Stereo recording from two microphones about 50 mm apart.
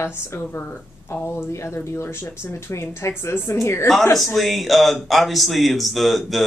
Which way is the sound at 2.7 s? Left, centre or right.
Left.